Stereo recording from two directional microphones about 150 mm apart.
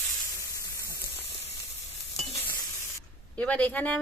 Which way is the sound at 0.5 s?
20° left (ahead or behind).